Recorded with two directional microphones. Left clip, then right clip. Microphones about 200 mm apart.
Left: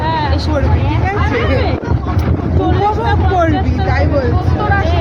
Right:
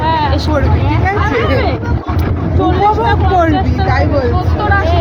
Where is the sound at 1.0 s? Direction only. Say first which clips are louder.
Right 3 dB; 15° right (ahead or behind).